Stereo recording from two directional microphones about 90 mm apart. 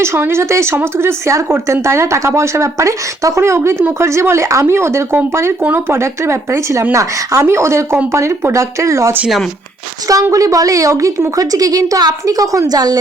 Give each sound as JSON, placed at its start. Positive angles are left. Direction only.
{"t": 0.0, "sound": "a woman's voice", "side_deg": -30}
{"t": 10.3, "sound": "a woman's voice", "side_deg": -40}